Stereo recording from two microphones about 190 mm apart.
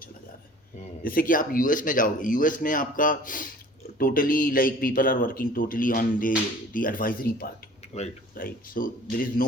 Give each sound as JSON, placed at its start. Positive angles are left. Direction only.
{"t": 1.0, "sound": "speech", "side_deg": 50}
{"t": 7.9, "sound": "speech", "side_deg": 35}
{"t": 8.4, "sound": "speech", "side_deg": 50}